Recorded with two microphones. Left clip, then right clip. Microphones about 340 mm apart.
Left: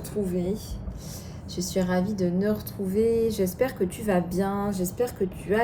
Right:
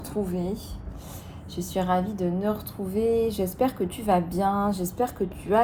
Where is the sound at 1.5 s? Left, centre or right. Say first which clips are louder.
Right 2 dB; centre.